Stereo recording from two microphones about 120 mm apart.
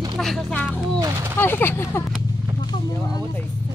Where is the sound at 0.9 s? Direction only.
30° right (ahead or behind).